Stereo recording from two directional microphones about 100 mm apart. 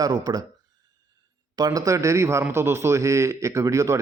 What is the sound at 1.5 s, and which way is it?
A man's voice, 40° right (ahead or behind).